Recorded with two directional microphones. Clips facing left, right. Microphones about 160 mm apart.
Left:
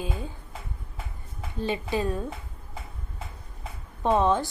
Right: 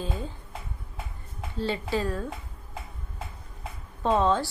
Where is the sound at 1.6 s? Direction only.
15° left (ahead or behind).